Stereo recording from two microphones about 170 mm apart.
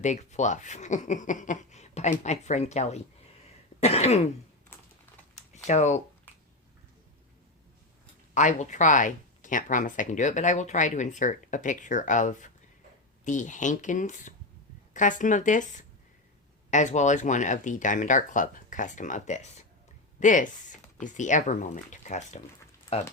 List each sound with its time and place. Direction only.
0.0 s speech: 45° left (ahead or behind)
3.8 s cough: 40° left (ahead or behind)
5.3 s typing: 40° left (ahead or behind)
8.4 s speech: 45° left (ahead or behind)
16.7 s speech: 45° left (ahead or behind)